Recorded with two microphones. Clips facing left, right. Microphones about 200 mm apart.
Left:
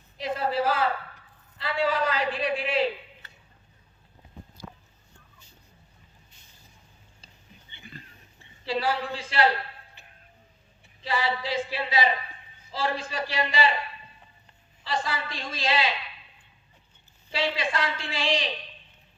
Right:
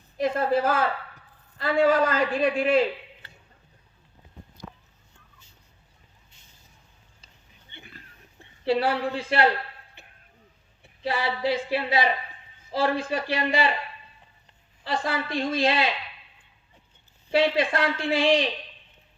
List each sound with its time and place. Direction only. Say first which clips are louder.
0.2 s a man's voice: right 4 dB; 50° right (ahead or behind)
7.9 s a sound: left 4 dB; 5° right (ahead or behind)
8.4 s a woman's voice: right 6 dB; 60° right (ahead or behind)
10.0 s a sound: right 2 dB; 60° right (ahead or behind)
10.8 s speech: right 1 dB; 55° right (ahead or behind)
14.8 s speech: right 3 dB; 55° right (ahead or behind)
17.3 s speech: right 6 dB; 55° right (ahead or behind)